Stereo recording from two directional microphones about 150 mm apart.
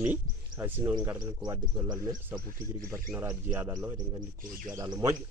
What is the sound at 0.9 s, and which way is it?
Speech, 25° right (ahead or behind).